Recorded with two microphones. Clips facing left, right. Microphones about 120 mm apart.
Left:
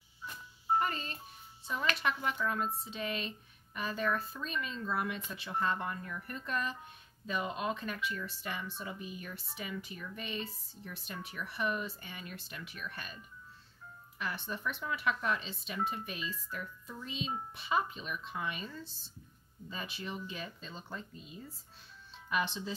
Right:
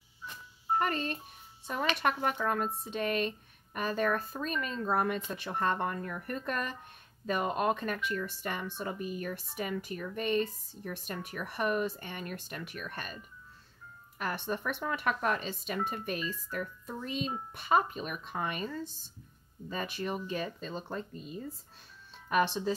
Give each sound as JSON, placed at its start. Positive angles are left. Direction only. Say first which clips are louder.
{"t": 0.7, "sound": "music", "louder": "right 4 dB", "side_deg": -55}
{"t": 1.7, "sound": "speech", "louder": "right 4 dB", "side_deg": -55}